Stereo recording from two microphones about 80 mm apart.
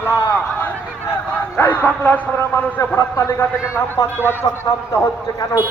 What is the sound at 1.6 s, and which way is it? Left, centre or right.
Speech, left.